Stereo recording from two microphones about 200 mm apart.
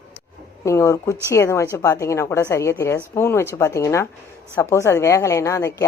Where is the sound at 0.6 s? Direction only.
15° left (ahead or behind).